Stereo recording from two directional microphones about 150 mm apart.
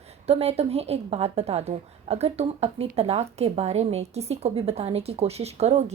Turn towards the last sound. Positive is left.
turn(degrees=-45)  # may be behind; listen again after turning